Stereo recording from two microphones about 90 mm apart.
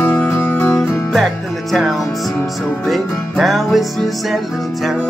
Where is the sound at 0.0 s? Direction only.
20° left (ahead or behind).